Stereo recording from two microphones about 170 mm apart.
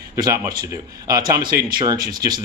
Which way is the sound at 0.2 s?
20° right (ahead or behind).